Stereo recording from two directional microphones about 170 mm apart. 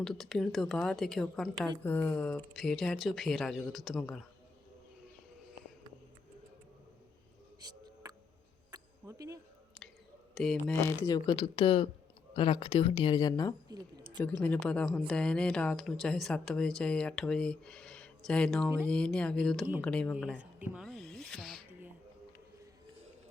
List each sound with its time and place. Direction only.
0.0 s speech: centre (ahead or behind)
7.6 s a sound: 20° right (ahead or behind)
10.3 s speech: 5° left (ahead or behind)
10.8 s speech: 15° left (ahead or behind)
11.3 s speech: 30° left (ahead or behind)
13.7 s a sound: 20° right (ahead or behind)
14.4 s speech: 10° left (ahead or behind)
20.8 s snake: 5° left (ahead or behind)